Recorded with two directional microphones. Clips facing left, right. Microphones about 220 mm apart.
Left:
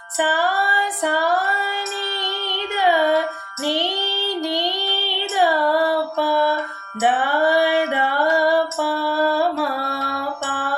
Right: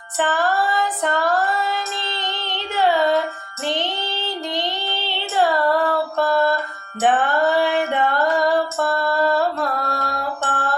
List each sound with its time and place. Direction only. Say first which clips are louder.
0.2 s female singing: right 1 dB; 10° left (ahead or behind)
7.0 s music: right 1 dB; 10° left (ahead or behind)
9.9 s a sound: right 1 dB; 40° right (ahead or behind)